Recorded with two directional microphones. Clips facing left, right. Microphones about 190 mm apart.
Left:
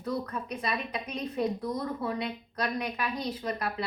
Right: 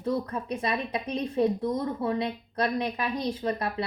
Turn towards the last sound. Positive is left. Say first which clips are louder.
# right 4 dB
turn(degrees=-30)  # may be behind; listen again after turning